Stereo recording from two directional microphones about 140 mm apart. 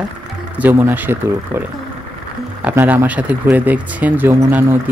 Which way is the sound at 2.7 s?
15° right (ahead or behind).